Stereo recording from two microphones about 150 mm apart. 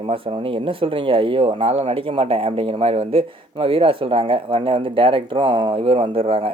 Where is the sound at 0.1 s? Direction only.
35° right (ahead or behind).